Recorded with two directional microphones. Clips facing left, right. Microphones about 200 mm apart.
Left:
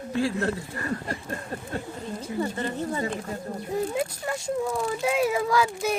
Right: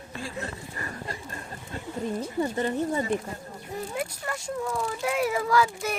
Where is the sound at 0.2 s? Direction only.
75° left (ahead or behind).